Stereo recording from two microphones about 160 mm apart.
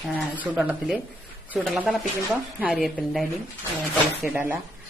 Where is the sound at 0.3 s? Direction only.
10° right (ahead or behind).